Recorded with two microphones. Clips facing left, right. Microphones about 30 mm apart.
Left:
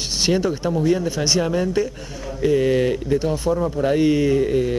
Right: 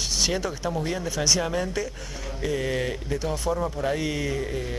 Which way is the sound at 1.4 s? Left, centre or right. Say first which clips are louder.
Left 7 dB; centre.